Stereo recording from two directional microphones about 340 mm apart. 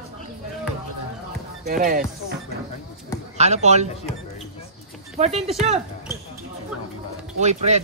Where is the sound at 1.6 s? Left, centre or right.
Right.